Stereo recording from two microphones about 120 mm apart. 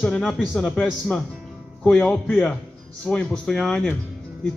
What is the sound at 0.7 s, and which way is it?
A man's voice, centre (ahead or behind).